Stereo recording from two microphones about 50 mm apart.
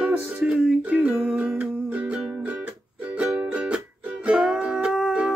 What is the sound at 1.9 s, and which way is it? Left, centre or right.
Music, right.